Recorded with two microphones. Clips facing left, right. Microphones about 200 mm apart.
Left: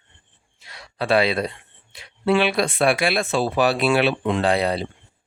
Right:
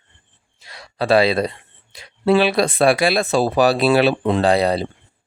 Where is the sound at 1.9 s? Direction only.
35° right (ahead or behind).